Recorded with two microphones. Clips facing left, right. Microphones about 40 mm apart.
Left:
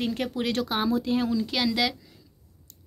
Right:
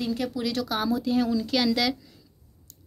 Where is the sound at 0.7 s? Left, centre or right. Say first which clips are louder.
Right 2 dB; left.